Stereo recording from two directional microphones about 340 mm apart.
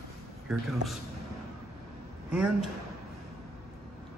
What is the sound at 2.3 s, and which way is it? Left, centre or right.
Speech, centre.